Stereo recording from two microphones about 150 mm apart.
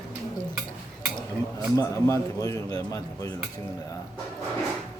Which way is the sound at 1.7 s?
20° left (ahead or behind).